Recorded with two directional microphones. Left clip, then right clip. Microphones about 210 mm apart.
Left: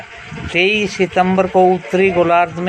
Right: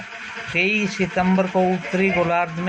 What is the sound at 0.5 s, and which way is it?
A man's voice, 50° left (ahead or behind).